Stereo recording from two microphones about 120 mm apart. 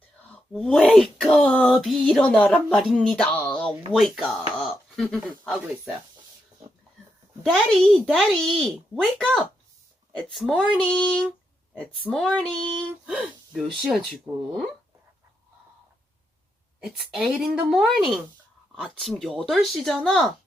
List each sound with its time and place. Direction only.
0.5 s speech: centre (ahead or behind)
3.3 s a sound: 20° left (ahead or behind)
3.9 s speech: centre (ahead or behind)
7.4 s speech: 5° left (ahead or behind)
10.8 s speech: 10° left (ahead or behind)
16.8 s speech: centre (ahead or behind)